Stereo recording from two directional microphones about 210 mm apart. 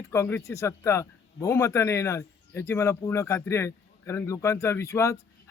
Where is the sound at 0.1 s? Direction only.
10° left (ahead or behind).